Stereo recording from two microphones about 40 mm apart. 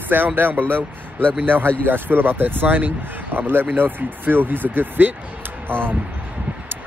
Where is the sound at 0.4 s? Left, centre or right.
Right.